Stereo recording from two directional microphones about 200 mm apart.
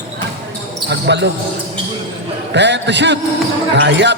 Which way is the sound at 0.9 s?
60° right (ahead or behind).